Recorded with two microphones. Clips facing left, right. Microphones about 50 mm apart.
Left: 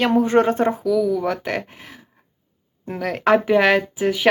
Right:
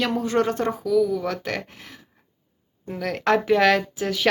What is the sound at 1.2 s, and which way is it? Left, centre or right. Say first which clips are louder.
Speech: left 4 dB; centre.